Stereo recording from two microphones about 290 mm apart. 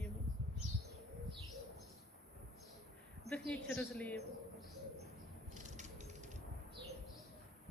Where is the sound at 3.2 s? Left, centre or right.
Centre.